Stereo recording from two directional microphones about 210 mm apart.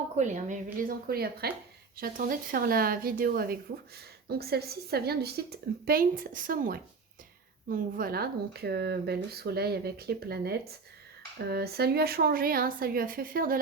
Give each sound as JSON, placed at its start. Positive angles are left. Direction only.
{"t": 0.2, "sound": "a woman's voice", "side_deg": -35}